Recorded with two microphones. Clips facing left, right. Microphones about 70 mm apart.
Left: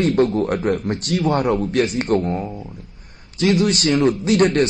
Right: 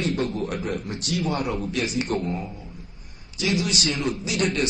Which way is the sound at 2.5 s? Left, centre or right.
Left.